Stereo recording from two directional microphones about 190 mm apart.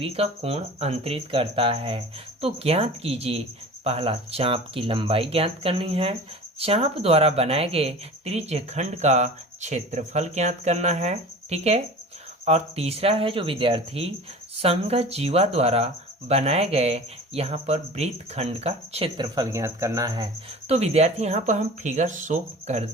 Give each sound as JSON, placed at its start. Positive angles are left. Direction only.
{"t": 0.0, "sound": "speech", "side_deg": -30}
{"t": 20.7, "sound": "speech", "side_deg": -35}